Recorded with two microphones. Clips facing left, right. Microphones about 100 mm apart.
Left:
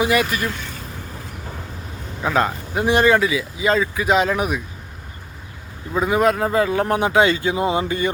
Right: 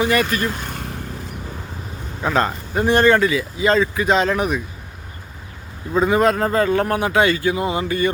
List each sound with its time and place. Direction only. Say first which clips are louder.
0.0 s speech: right 1 dB; 10° left (ahead or behind)
0.6 s vehicle: right 4 dB; 55° right (ahead or behind)
2.2 s speech: even; 5° left (ahead or behind)
5.9 s speech: right 2 dB; 5° left (ahead or behind)
6.8 s speech: left 1 dB; 20° left (ahead or behind)